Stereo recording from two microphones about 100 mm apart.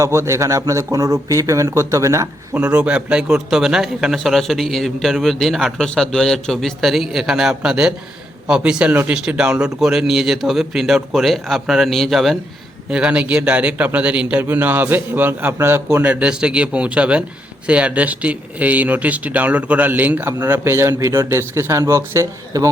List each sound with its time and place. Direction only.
0.0 s speech: 30° right (ahead or behind)
2.6 s a man's voice: 10° right (ahead or behind)
12.9 s speech: 10° right (ahead or behind); by 22.7 s 30° right (ahead or behind)